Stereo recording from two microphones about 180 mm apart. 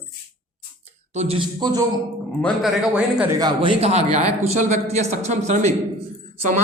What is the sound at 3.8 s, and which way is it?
A man's voice, 35° right (ahead or behind).